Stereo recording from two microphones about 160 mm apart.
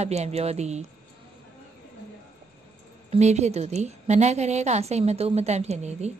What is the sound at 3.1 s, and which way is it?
A woman's voice, 45° right (ahead or behind).